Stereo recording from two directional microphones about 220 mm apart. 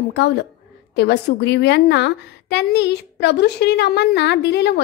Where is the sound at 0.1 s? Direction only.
50° left (ahead or behind).